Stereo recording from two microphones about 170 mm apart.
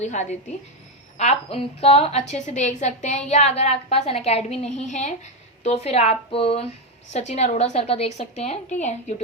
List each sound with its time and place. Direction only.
0.0 s a woman's voice: 40° left (ahead or behind)